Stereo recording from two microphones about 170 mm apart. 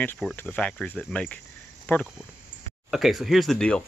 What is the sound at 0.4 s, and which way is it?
Speech, 10° left (ahead or behind).